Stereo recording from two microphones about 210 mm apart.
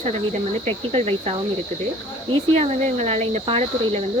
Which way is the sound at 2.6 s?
30° right (ahead or behind).